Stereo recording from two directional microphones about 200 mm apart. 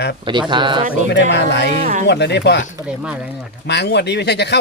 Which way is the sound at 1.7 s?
40° right (ahead or behind).